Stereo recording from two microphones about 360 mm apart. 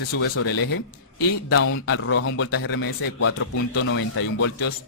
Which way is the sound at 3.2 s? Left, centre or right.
Left.